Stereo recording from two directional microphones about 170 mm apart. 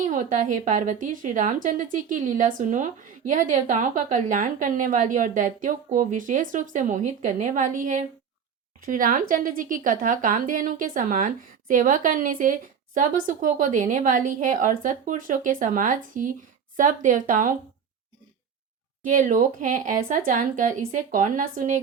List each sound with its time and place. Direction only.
0.0 s a woman's voice: 45° right (ahead or behind)
19.0 s a woman's voice: 50° right (ahead or behind)